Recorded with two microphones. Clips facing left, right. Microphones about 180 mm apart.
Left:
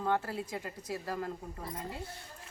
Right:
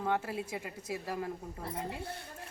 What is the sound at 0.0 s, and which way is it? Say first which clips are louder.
Speech: left 1 dB; 15° right (ahead or behind).